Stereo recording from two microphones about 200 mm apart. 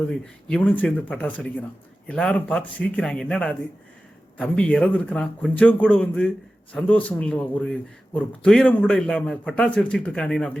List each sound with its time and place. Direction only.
0.1 s a man's voice: 5° left (ahead or behind)